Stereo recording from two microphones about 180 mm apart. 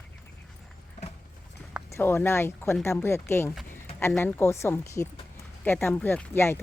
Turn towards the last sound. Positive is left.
turn(degrees=15)  # may be behind; listen again after turning